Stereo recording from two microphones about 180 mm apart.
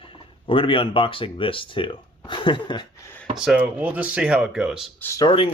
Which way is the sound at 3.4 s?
5° right (ahead or behind).